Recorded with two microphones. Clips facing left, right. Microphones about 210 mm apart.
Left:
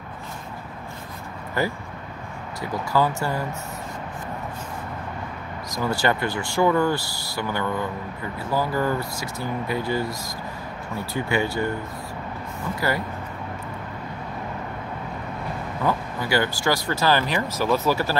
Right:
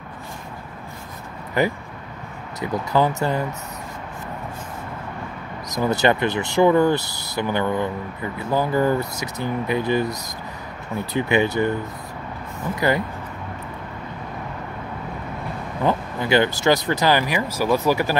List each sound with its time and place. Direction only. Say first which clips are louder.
1.6 s speech: right 4 dB; 20° right (ahead or behind)
5.7 s speech: right 4 dB; 20° right (ahead or behind)
11.1 s speech: right 5 dB; 20° right (ahead or behind)
12.8 s speech: right 5 dB; 20° right (ahead or behind)
15.8 s speech: right 3 dB; 20° right (ahead or behind)